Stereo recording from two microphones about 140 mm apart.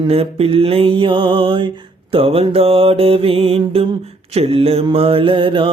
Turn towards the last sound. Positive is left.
turn(degrees=-40)  # may be behind; listen again after turning